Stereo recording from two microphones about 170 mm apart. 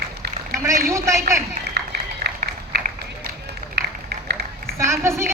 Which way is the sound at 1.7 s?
70° right (ahead or behind).